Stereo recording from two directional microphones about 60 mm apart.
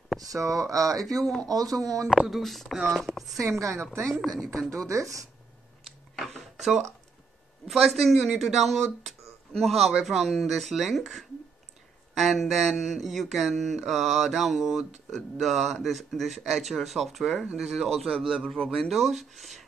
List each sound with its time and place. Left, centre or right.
0.2 s speech: right
1.2 s speech: centre
1.5 s speech: right
2.1 s speech: centre
3.3 s speech: right
4.0 s speech: centre
4.6 s speech: right
5.9 s a sound: centre
7.6 s speech: centre